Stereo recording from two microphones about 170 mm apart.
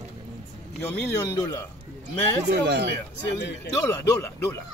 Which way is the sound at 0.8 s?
20° left (ahead or behind).